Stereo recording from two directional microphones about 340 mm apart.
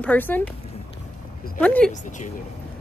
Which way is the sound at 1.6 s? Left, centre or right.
Centre.